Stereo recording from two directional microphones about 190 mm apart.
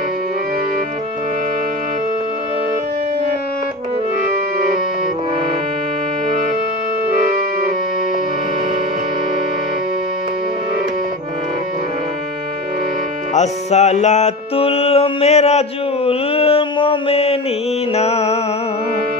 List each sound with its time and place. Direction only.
13.3 s music: 35° left (ahead or behind)
17.9 s mantra: 35° left (ahead or behind)